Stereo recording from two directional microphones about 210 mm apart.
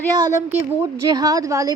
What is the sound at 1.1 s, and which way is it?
Speech, 15° right (ahead or behind).